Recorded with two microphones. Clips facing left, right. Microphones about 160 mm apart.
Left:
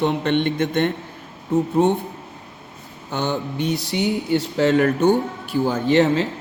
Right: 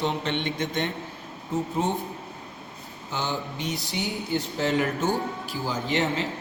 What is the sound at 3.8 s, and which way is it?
A man's voice, 75° left (ahead or behind).